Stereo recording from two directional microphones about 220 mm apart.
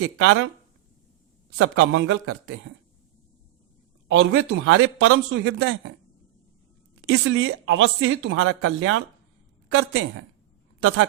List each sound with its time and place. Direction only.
0.0 s speech: 65° right (ahead or behind)
1.5 s speech: 70° right (ahead or behind)
4.1 s speech: 60° right (ahead or behind)
7.0 s speech: 70° right (ahead or behind)
10.8 s speech: 70° right (ahead or behind)